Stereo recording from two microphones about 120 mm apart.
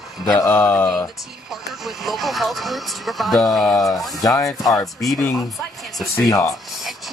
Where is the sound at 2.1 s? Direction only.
Centre (ahead or behind).